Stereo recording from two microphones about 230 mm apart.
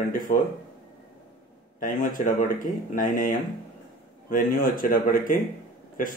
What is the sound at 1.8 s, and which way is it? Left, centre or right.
Speech, left.